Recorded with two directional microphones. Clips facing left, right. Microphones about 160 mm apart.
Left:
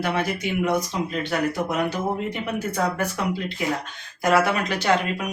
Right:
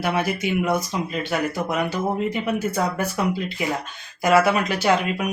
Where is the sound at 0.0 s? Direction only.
5° right (ahead or behind).